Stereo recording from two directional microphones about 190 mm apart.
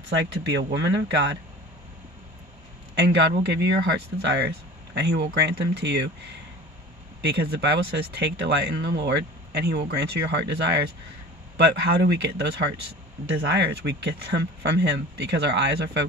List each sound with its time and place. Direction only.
0.1 s speech: 70° right (ahead or behind)
3.4 s speech: 60° right (ahead or behind)
7.2 s speech: 60° right (ahead or behind)